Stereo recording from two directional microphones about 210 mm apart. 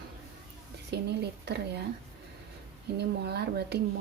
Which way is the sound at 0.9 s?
50° right (ahead or behind).